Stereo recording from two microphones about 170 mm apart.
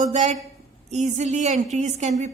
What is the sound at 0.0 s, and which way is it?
A woman's voice, 45° right (ahead or behind).